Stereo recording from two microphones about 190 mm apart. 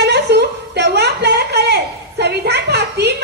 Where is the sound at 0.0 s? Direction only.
60° right (ahead or behind).